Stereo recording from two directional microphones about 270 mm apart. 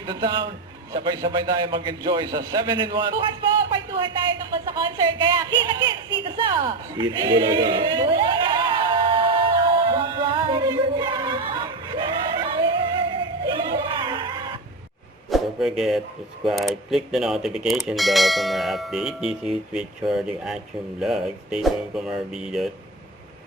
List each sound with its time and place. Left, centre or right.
0.1 s a man's voice: centre
6.2 s a sound: centre
15.3 s a man's voice: centre